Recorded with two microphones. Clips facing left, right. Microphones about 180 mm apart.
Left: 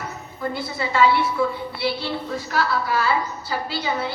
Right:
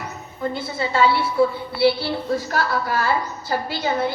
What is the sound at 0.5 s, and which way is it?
A woman's voice, 25° right (ahead or behind).